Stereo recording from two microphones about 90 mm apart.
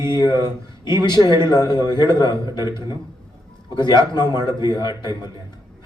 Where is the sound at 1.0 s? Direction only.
55° left (ahead or behind).